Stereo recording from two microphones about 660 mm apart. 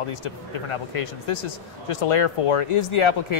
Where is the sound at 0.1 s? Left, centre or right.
Left.